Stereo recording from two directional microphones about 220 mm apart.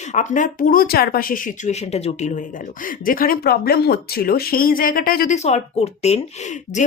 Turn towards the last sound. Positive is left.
turn(degrees=30)  # may be behind; listen again after turning